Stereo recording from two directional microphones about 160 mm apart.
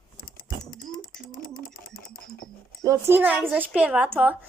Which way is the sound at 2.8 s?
15° right (ahead or behind).